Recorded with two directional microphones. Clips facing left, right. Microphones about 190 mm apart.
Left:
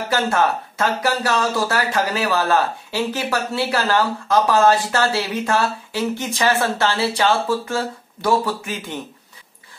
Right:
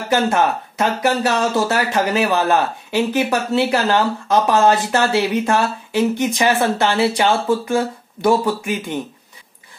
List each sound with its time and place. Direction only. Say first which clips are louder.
0.1 s speech: right 3 dB; 20° right (ahead or behind)